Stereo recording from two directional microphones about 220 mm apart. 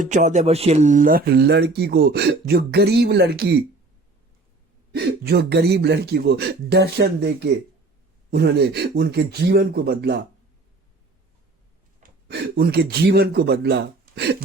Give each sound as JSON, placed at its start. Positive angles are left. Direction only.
{"t": 0.0, "sound": "speech", "side_deg": -35}
{"t": 4.9, "sound": "speech", "side_deg": -45}
{"t": 12.3, "sound": "speech", "side_deg": -45}